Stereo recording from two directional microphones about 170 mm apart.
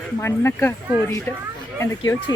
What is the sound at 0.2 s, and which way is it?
Speech, 15° left (ahead or behind).